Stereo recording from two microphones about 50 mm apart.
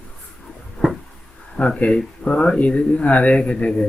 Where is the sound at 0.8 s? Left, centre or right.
Centre.